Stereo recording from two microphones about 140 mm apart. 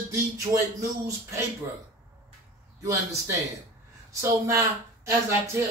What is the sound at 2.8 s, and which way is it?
A man's voice, 20° right (ahead or behind).